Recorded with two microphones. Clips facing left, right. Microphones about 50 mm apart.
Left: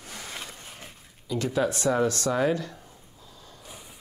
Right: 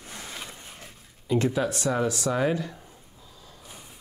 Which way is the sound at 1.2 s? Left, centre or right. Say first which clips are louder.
Right 5 dB; right.